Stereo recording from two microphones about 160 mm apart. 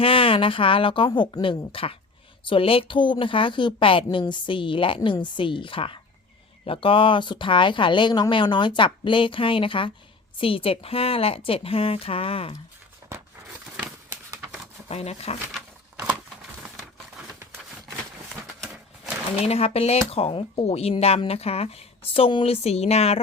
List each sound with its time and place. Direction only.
0.0 s speech: 35° left (ahead or behind)
13.7 s a sound: 15° right (ahead or behind)
14.8 s speech: 40° left (ahead or behind)
19.5 s speech: 40° left (ahead or behind)